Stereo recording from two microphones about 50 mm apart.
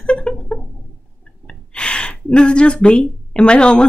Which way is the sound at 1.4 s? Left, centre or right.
Centre.